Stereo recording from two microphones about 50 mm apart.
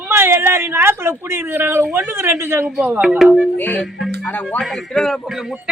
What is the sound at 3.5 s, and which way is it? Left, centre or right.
Speech, left.